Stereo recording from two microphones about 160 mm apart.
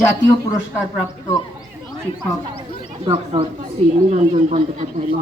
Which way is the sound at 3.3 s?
40° right (ahead or behind).